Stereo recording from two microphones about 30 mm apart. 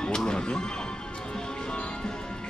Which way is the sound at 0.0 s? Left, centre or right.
Left.